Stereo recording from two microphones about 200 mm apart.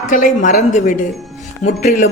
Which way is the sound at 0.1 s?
40° left (ahead or behind).